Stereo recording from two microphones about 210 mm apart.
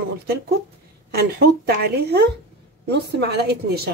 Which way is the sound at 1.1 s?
50° right (ahead or behind).